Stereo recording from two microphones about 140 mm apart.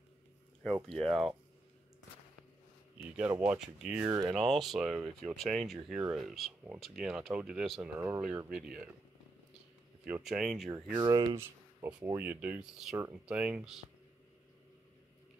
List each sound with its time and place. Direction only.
0.8 s speech: 5° left (ahead or behind)
3.0 s speech: 10° right (ahead or behind)
8.0 s speech: 15° right (ahead or behind)
10.0 s speech: 10° right (ahead or behind)
11.0 s speech: 30° right (ahead or behind)
11.3 s a sound: 15° right (ahead or behind)
12.2 s speech: 10° right (ahead or behind)
12.9 s speech: 20° right (ahead or behind)
13.3 s speech: 5° right (ahead or behind)